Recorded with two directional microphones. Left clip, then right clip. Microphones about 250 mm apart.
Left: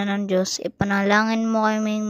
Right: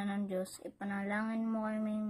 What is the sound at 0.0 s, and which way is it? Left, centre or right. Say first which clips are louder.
Speech: left 16 dB; left.